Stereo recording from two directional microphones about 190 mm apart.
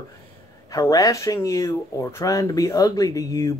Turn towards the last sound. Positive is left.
turn(degrees=20)  # may be behind; listen again after turning